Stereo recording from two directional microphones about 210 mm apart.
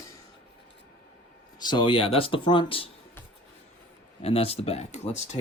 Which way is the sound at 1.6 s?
20° left (ahead or behind).